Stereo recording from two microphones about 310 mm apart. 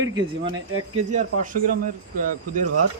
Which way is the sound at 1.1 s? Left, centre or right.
Right.